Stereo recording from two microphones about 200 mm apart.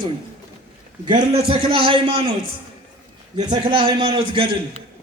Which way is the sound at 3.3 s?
20° right (ahead or behind).